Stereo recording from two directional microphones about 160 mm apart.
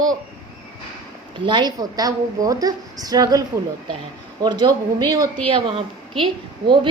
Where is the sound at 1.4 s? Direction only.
30° right (ahead or behind).